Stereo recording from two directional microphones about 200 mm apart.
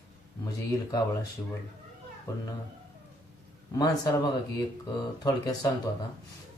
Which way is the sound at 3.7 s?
20° left (ahead or behind).